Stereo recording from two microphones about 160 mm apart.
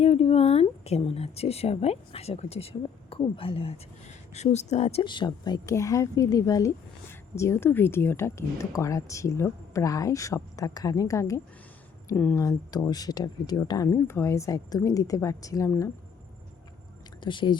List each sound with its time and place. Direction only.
0.0 s speech: 40° left (ahead or behind); by 15.9 s 20° left (ahead or behind)
17.2 s speech: 30° left (ahead or behind)